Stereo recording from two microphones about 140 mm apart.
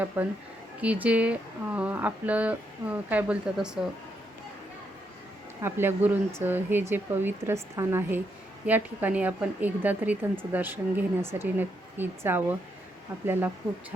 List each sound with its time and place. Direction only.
0.2 s speech: 15° right (ahead or behind)
5.6 s speech: 15° right (ahead or behind)